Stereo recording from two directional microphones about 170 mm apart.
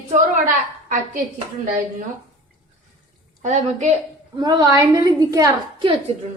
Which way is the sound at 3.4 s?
40° right (ahead or behind).